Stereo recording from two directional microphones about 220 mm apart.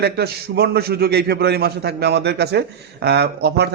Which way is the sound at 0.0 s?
45° right (ahead or behind).